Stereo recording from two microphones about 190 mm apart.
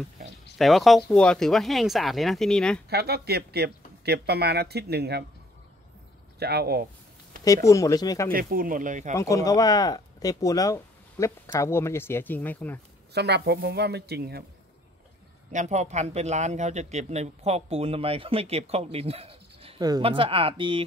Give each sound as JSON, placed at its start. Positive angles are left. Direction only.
{"t": 0.6, "sound": "speech", "side_deg": 0}
{"t": 2.9, "sound": "speech", "side_deg": -60}
{"t": 6.4, "sound": "speech", "side_deg": -55}
{"t": 7.4, "sound": "speech", "side_deg": 15}
{"t": 8.3, "sound": "speech", "side_deg": -50}
{"t": 9.1, "sound": "speech", "side_deg": 15}
{"t": 13.1, "sound": "speech", "side_deg": -60}
{"t": 15.5, "sound": "speech", "side_deg": -40}